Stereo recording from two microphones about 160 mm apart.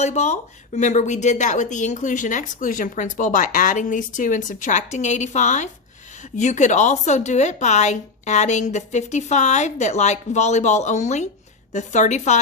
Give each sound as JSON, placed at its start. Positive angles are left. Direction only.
{"t": 0.0, "sound": "speech", "side_deg": 45}